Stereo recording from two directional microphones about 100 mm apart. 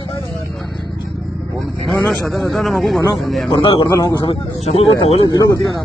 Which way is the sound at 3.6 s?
55° left (ahead or behind).